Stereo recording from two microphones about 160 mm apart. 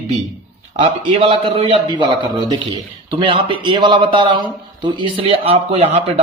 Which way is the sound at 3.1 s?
30° right (ahead or behind).